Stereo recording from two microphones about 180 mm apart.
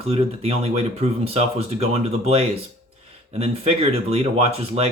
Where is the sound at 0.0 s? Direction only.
35° right (ahead or behind).